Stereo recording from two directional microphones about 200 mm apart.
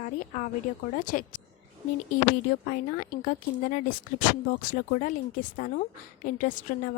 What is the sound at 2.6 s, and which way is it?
A woman's voice, 40° left (ahead or behind).